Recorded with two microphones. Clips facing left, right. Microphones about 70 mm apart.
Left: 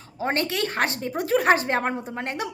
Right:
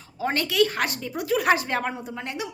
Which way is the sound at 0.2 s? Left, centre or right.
Left.